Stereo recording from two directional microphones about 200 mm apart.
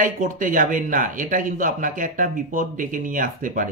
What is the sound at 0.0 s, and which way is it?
Speech, 40° right (ahead or behind).